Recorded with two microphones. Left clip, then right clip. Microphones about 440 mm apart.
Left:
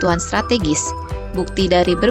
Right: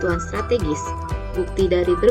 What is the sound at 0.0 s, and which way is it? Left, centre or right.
A woman's voice, centre.